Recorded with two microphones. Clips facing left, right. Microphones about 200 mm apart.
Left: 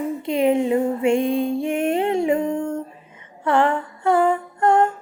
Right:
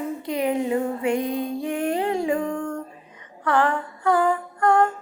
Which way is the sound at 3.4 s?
25° left (ahead or behind).